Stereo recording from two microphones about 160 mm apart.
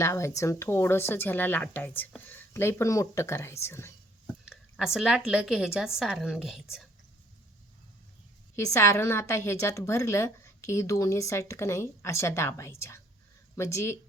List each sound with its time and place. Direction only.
0.0 s a woman's voice: 15° left (ahead or behind)
4.9 s a woman's voice: 5° right (ahead or behind)
8.5 s a woman's voice: 15° left (ahead or behind)